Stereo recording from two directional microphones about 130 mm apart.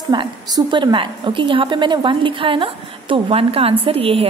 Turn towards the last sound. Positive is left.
turn(degrees=-45)  # may be behind; listen again after turning